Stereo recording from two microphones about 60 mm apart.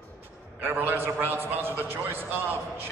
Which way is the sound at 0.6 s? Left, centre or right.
Right.